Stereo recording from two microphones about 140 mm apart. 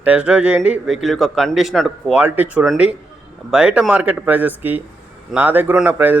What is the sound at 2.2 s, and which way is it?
Speech, 10° right (ahead or behind).